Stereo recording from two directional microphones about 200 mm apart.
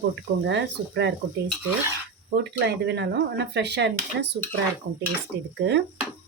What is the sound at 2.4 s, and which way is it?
Speech, 60° right (ahead or behind).